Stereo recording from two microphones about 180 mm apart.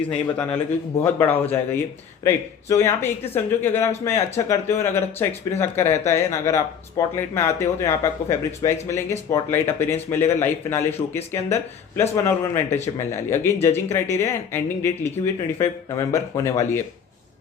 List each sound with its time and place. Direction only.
0.1 s speech: 5° left (ahead or behind)